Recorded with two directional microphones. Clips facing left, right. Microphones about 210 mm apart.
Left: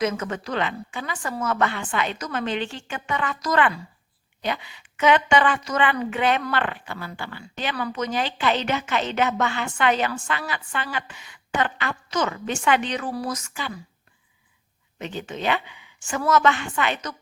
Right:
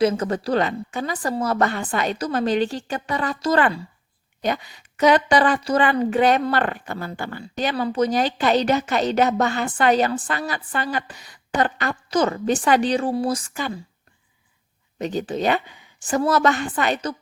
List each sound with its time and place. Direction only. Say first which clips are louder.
0.0 s a woman's voice: right 6 dB; 35° right (ahead or behind)
4.4 s a woman's voice: right 4 dB; 40° right (ahead or behind)
14.9 s a woman's voice: right 7 dB; 40° right (ahead or behind)